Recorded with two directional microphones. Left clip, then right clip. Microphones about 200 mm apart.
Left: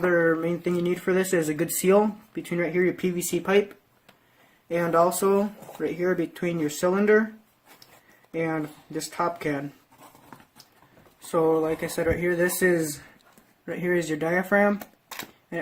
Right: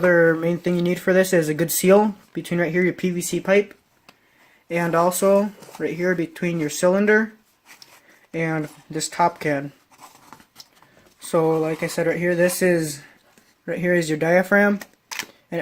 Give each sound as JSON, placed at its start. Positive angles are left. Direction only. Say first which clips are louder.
{"t": 0.1, "sound": "speech", "louder": "right 5 dB", "side_deg": -45}
{"t": 4.7, "sound": "speech", "louder": "right 2 dB", "side_deg": -40}
{"t": 8.3, "sound": "speech", "louder": "right 3 dB", "side_deg": -45}
{"t": 11.3, "sound": "speech", "louder": "right 3 dB", "side_deg": -45}